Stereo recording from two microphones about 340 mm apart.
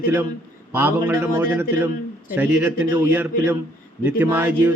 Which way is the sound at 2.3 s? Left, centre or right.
Centre.